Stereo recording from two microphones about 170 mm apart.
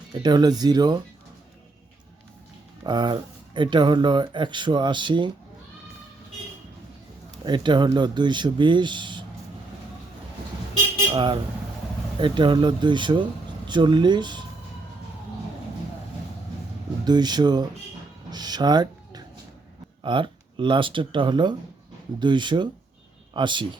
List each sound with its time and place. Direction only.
0.1 s speech: 25° right (ahead or behind)
2.8 s speech: 25° right (ahead or behind)
7.4 s speech: 25° right (ahead or behind)
11.1 s speech: 25° right (ahead or behind)
17.1 s speech: 25° right (ahead or behind)
18.3 s a sound: 25° right (ahead or behind)
20.0 s speech: 30° right (ahead or behind)